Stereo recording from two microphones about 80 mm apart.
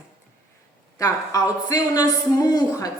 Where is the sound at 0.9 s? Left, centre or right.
Left.